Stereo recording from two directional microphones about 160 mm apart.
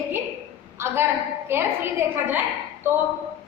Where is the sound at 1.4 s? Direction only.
15° right (ahead or behind).